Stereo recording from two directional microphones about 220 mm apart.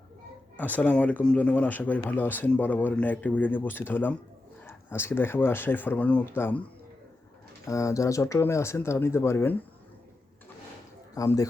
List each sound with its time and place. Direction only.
0.5 s speech: 5° left (ahead or behind)
7.7 s speech: 15° left (ahead or behind)
11.1 s speech: 15° left (ahead or behind)